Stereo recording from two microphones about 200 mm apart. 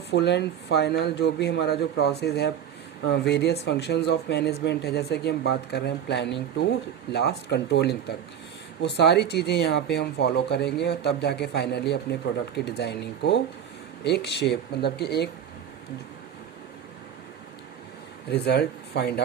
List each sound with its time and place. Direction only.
0.1 s speech: 55° left (ahead or behind)
18.3 s speech: 55° left (ahead or behind)